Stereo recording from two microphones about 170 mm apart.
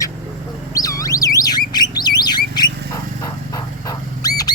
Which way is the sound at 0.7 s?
20° left (ahead or behind).